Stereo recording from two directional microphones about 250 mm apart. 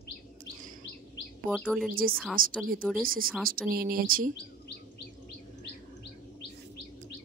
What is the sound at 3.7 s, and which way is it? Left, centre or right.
Speech, right.